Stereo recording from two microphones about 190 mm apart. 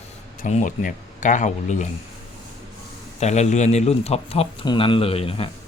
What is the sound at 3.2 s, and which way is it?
A man's voice, 35° left (ahead or behind).